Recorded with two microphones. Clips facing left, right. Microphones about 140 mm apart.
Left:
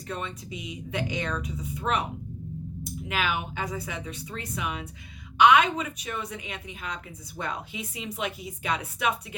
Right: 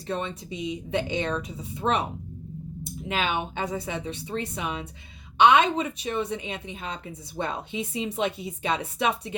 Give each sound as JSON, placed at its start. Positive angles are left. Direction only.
{"t": 0.1, "sound": "a woman's voice", "side_deg": -30}